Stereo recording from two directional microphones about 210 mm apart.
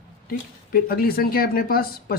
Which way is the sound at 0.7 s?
45° left (ahead or behind).